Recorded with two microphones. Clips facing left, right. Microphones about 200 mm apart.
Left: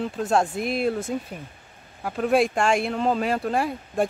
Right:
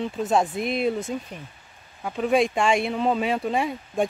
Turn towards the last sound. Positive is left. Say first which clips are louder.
# even
turn(degrees=0)  # may be behind; listen again after turning